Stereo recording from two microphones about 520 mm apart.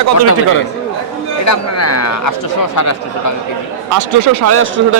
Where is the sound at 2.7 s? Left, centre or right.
Left.